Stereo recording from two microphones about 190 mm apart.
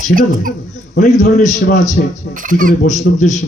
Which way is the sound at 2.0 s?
55° left (ahead or behind).